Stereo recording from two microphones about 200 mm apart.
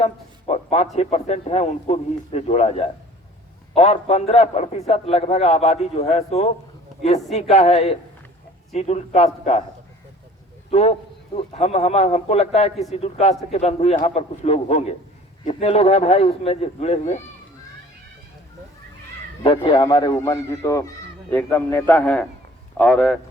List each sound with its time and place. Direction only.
0.0 s a sound: 30° left (ahead or behind)
0.9 s a man's voice: 30° left (ahead or behind)
10.7 s a man's voice: 30° left (ahead or behind)
19.4 s a man's voice: 25° left (ahead or behind); by 23.1 s 5° left (ahead or behind)